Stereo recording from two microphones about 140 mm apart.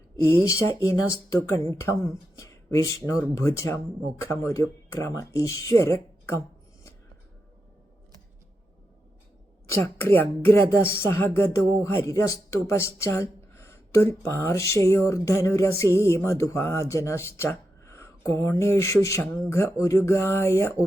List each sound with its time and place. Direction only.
0.2 s speech: 15° left (ahead or behind)
9.7 s speech: 15° left (ahead or behind)